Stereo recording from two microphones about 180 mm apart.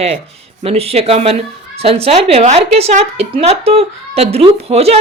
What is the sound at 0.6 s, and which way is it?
A woman's voice, 35° right (ahead or behind).